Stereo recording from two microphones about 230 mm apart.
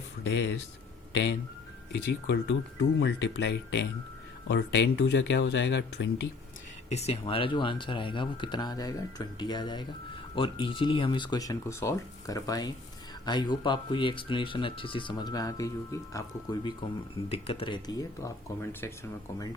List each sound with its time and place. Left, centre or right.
0.3 s speech: left
6.9 s speech: left; by 18.9 s centre